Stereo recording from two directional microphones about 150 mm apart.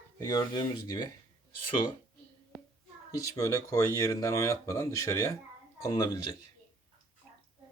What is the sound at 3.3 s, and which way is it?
Speech, 25° left (ahead or behind).